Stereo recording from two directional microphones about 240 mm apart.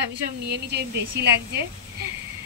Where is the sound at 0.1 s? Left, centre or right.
Right.